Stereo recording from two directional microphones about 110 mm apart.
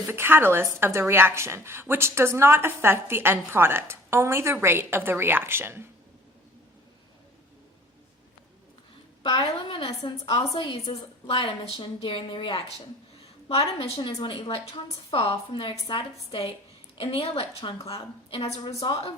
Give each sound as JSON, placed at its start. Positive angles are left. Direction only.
{"t": 0.0, "sound": "speech", "side_deg": -20}
{"t": 9.2, "sound": "a woman's voice", "side_deg": 50}
{"t": 18.8, "sound": "a woman's voice", "side_deg": 45}